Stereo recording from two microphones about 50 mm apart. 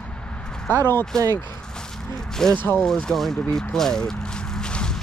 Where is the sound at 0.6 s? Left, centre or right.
Left.